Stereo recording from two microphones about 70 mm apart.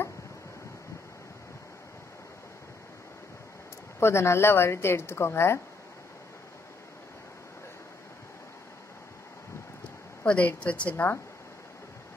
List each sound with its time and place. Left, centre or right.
4.0 s a woman's voice: left
10.2 s a woman's voice: centre